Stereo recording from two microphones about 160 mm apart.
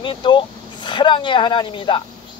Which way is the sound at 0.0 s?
30° left (ahead or behind).